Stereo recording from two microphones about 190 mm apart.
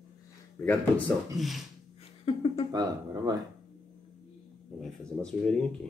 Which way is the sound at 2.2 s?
30° left (ahead or behind).